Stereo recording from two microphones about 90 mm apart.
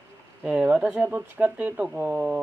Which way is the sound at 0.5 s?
15° right (ahead or behind).